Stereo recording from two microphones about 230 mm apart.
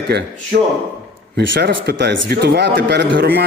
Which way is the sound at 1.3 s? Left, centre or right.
Right.